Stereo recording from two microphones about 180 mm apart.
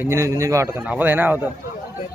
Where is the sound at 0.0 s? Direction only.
15° right (ahead or behind).